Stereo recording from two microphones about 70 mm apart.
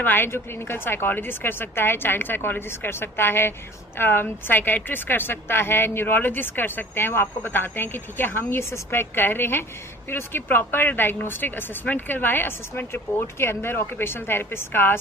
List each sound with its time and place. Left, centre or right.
0.0 s a woman's voice: left